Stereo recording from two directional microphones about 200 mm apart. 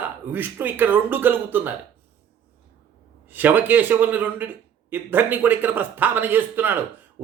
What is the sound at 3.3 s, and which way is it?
Speech, 10° right (ahead or behind).